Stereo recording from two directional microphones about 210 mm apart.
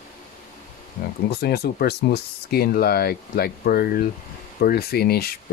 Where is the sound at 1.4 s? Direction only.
45° left (ahead or behind).